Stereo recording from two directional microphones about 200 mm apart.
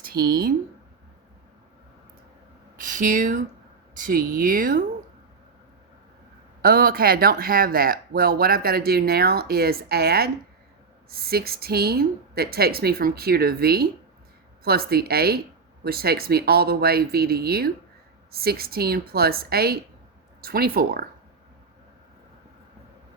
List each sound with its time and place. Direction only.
0.0 s speech: 50° right (ahead or behind)
2.7 s speech: 40° right (ahead or behind)
6.6 s speech: 45° right (ahead or behind)